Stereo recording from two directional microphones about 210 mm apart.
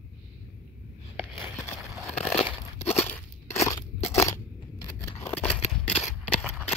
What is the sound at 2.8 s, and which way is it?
Crunch, 10° left (ahead or behind).